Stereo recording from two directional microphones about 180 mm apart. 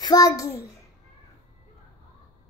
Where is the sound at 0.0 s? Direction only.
20° left (ahead or behind).